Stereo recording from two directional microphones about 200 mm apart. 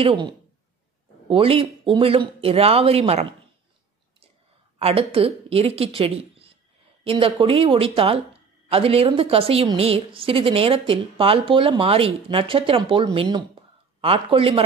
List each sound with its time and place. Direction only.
0.0 s speech: 25° right (ahead or behind)
4.7 s speech: 30° right (ahead or behind)